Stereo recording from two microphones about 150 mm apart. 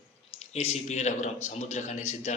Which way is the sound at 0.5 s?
45° left (ahead or behind).